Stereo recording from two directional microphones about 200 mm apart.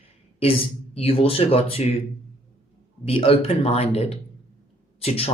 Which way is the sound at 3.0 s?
30° left (ahead or behind).